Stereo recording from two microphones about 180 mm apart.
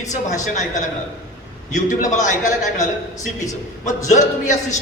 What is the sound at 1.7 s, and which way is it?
A man's voice, 45° left (ahead or behind).